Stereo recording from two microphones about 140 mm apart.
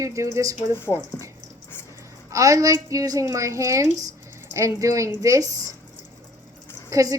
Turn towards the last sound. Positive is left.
turn(degrees=-25)  # may be behind; listen again after turning